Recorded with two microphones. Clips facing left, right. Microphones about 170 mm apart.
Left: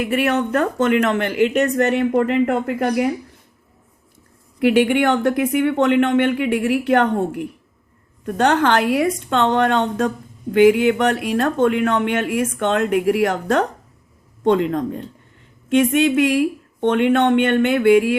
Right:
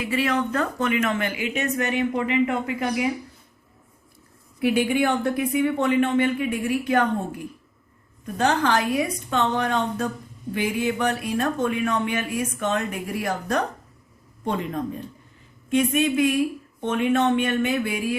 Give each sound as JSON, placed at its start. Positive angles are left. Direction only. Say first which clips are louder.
{"t": 0.0, "sound": "speech", "louder": "left 5 dB", "side_deg": 60}
{"t": 0.8, "sound": "speech", "louder": "left 7 dB", "side_deg": 70}
{"t": 4.6, "sound": "speech", "louder": "left 6 dB", "side_deg": 75}